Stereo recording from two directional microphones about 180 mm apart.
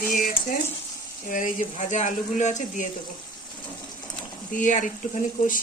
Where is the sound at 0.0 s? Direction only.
50° left (ahead or behind).